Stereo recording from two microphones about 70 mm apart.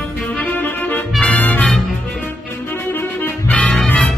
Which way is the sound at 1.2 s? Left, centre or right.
Left.